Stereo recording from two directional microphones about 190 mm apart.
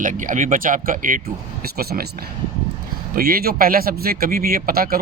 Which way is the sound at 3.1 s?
50° right (ahead or behind).